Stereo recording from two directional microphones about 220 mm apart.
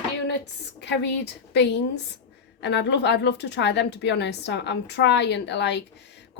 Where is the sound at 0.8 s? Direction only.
50° left (ahead or behind).